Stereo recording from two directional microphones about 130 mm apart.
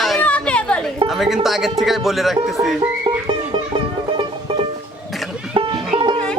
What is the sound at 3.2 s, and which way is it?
Music, 40° right (ahead or behind).